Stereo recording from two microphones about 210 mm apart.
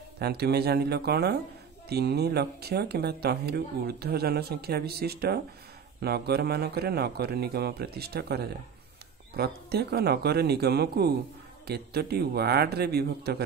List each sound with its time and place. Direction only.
0.2 s speech: 50° right (ahead or behind)